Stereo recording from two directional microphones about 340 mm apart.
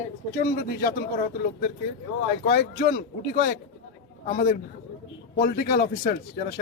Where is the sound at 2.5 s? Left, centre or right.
Left.